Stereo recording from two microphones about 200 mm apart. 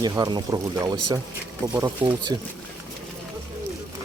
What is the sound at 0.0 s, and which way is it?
Speech, 20° right (ahead or behind).